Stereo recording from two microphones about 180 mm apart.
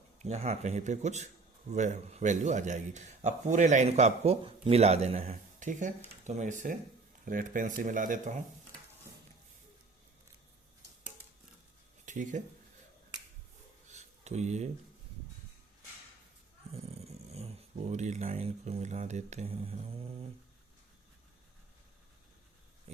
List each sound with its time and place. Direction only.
0.2 s a man's voice: 40° right (ahead or behind)
12.0 s speech: 45° right (ahead or behind)
13.9 s a sound: 40° right (ahead or behind)
17.2 s a man's voice: 35° right (ahead or behind)